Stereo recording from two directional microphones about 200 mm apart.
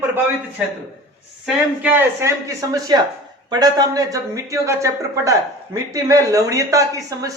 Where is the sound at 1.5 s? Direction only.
5° right (ahead or behind).